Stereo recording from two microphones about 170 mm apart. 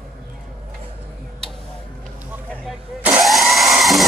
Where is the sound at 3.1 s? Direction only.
5° right (ahead or behind).